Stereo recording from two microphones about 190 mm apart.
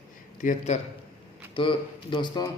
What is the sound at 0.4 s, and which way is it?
A man's voice, 35° left (ahead or behind).